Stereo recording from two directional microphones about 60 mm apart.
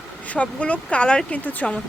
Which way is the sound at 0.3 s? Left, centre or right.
Left.